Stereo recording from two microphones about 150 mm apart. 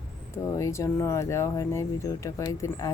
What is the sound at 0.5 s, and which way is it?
A woman's voice, 20° left (ahead or behind).